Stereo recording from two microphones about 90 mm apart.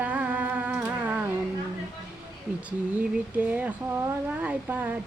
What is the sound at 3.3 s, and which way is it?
Speech, 15° right (ahead or behind).